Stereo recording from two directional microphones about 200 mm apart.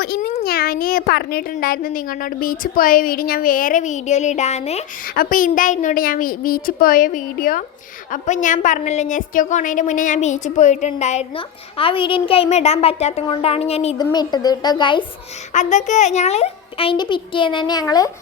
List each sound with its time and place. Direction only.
0.0 s a sound: 50° left (ahead or behind)
0.4 s a child's voice: 50° left (ahead or behind)
5.1 s a child's voice: 45° left (ahead or behind); by 15.0 s 25° left (ahead or behind)
15.5 s a child's voice: 35° left (ahead or behind); by 18.1 s 20° left (ahead or behind)